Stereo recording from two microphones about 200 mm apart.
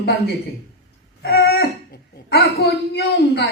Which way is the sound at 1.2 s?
55° left (ahead or behind).